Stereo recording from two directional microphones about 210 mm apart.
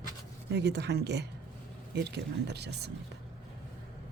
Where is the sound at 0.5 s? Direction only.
55° right (ahead or behind).